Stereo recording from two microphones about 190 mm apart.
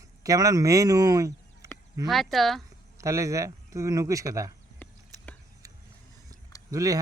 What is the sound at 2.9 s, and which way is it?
Speech, 15° right (ahead or behind).